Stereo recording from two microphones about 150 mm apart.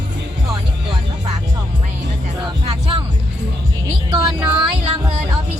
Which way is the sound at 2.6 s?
35° right (ahead or behind).